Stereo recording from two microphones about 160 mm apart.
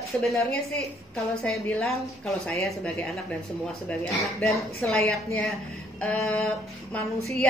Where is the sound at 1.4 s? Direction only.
Centre (ahead or behind).